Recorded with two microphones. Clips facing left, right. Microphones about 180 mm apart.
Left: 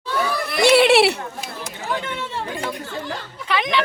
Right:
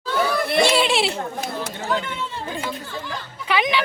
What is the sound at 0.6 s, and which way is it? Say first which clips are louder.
Baby cry: left 6 dB; 60° left (ahead or behind).